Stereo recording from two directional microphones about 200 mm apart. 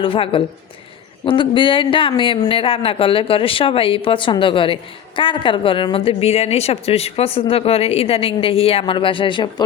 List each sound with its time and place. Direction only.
0.0 s speech: 25° left (ahead or behind)